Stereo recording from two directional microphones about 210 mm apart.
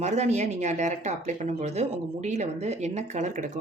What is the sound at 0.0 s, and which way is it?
Speech, 35° right (ahead or behind).